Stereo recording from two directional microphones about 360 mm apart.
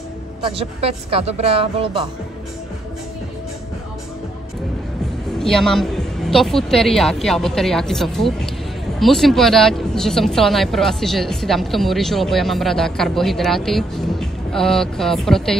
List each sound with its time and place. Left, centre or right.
0.4 s a woman's voice: centre
5.4 s speech: centre